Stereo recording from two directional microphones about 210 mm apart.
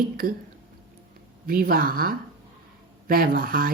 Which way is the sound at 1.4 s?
45° right (ahead or behind).